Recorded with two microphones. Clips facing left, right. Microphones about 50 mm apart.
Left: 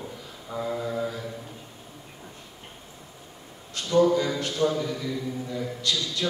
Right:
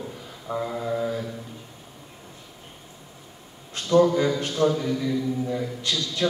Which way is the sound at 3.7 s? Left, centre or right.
Right.